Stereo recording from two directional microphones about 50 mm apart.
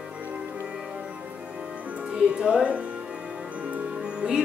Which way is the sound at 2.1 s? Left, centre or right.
Right.